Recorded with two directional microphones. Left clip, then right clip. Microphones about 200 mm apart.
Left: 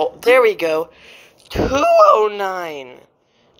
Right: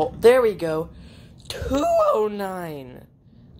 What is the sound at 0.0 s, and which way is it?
Speech, 25° left (ahead or behind).